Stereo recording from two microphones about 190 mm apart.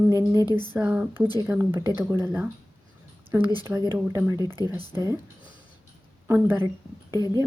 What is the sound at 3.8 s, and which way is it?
Speech, 15° right (ahead or behind).